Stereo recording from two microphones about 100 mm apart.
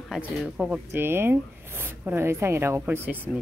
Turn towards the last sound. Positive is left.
turn(degrees=-20)  # may be behind; listen again after turning